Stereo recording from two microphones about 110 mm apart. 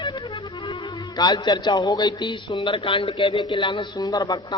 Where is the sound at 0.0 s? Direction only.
45° left (ahead or behind).